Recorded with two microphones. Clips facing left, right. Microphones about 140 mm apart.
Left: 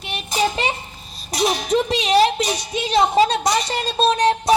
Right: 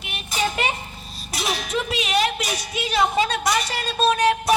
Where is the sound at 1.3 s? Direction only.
40° left (ahead or behind).